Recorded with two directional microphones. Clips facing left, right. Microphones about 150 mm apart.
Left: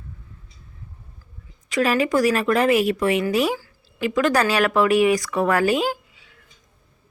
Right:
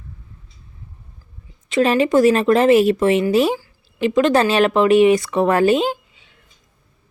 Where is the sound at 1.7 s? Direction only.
25° right (ahead or behind).